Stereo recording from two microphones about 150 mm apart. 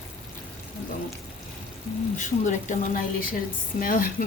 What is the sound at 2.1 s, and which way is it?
Speech, 55° left (ahead or behind).